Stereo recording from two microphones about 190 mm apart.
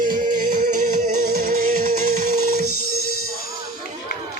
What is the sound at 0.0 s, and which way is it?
Music, 45° right (ahead or behind).